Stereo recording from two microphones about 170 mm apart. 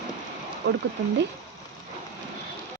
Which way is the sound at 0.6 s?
80° right.